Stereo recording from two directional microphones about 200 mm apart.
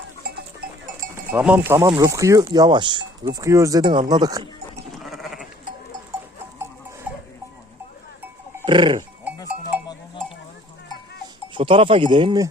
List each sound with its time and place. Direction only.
1.3 s speech: 10° right (ahead or behind)
4.9 s sheep: centre (ahead or behind)
8.6 s speech: 25° right (ahead or behind)
9.7 s sheep: centre (ahead or behind)
11.5 s speech: 25° right (ahead or behind)